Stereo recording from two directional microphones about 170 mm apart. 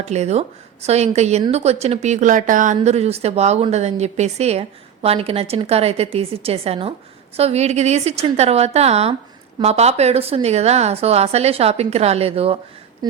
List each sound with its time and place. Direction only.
0.0 s a woman's voice: 40° right (ahead or behind)
2.8 s a woman's voice: 40° right (ahead or behind)
13.0 s a sound: 25° right (ahead or behind)